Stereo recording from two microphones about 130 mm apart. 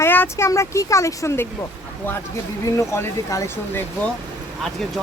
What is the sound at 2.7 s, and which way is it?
Speech, 20° left (ahead or behind).